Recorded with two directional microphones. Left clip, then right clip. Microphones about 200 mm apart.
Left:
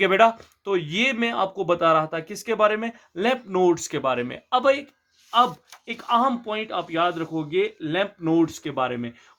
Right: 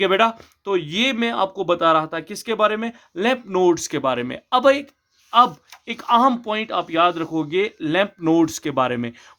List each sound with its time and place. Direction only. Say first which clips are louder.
0.0 s speech: even; 20° right (ahead or behind); by 9.1 s 45° right (ahead or behind)